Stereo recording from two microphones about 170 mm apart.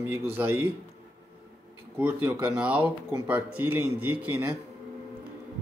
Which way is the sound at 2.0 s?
10° right (ahead or behind).